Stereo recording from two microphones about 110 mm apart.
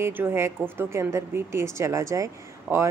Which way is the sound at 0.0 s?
20° right (ahead or behind).